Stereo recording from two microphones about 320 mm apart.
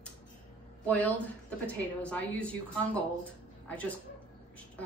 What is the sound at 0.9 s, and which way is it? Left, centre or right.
A woman's voice, centre.